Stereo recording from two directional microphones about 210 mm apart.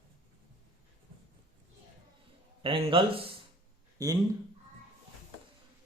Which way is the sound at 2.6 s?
25° right (ahead or behind).